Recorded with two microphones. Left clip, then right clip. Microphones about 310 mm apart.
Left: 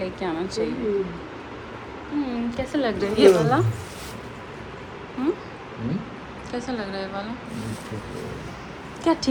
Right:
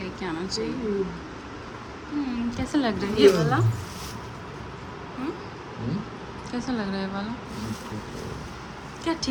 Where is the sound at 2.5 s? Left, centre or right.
Centre.